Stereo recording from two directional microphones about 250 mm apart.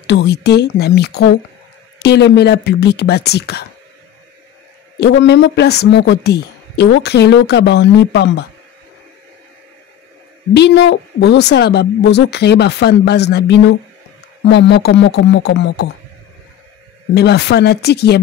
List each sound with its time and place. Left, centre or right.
0.0 s speech: left
5.0 s a woman's voice: left
10.5 s a woman's voice: left
17.1 s speech: left